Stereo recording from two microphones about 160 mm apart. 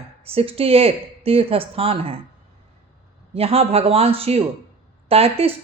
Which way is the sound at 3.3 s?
40° right (ahead or behind).